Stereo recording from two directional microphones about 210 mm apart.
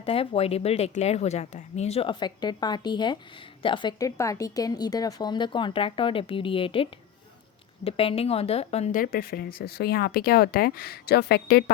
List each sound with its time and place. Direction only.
0.0 s a woman's voice: 25° left (ahead or behind)
7.9 s speech: 25° left (ahead or behind); by 11.6 s 50° left (ahead or behind)